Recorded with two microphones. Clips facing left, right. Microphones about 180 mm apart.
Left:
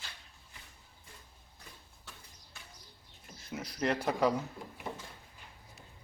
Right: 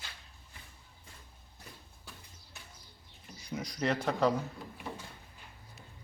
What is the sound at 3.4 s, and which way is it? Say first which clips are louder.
Speech: right 1 dB; 5° left (ahead or behind).